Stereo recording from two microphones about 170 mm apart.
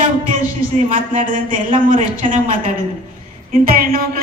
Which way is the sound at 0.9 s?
55° right (ahead or behind).